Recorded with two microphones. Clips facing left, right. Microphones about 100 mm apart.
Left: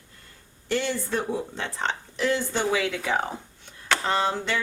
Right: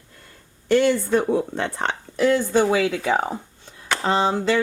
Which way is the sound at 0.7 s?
55° right (ahead or behind).